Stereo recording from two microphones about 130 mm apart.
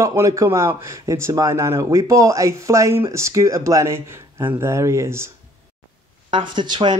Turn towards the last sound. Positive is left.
turn(degrees=-35)  # may be behind; listen again after turning